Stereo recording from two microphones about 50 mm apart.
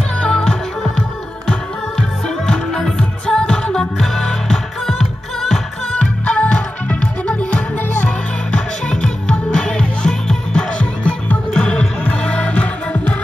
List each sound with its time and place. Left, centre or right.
0.2 s music: centre
5.9 s music: left